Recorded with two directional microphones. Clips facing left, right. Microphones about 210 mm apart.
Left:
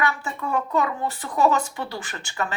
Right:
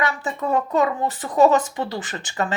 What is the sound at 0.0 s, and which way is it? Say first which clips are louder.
Speech: right 2 dB; 20° right (ahead or behind).